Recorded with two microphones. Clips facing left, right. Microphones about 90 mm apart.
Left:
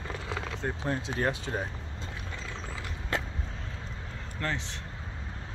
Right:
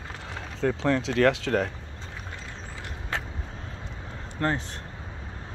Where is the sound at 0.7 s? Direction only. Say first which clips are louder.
Right 9 dB; 85° right.